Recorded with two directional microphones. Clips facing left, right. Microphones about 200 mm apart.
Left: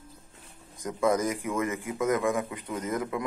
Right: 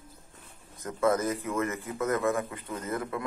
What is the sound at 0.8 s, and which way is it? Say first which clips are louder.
A man's voice: left 1 dB; 15° left (ahead or behind).